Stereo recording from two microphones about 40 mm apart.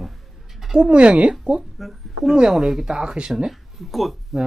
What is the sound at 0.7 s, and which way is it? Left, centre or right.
Speech, right.